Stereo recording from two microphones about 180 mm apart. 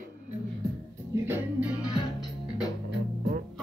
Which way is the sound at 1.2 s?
10° right (ahead or behind).